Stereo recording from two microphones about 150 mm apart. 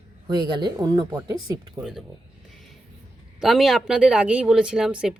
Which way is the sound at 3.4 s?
Centre (ahead or behind).